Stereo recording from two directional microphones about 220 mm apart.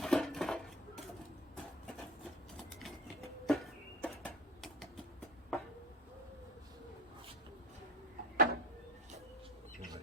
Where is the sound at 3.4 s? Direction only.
Centre (ahead or behind).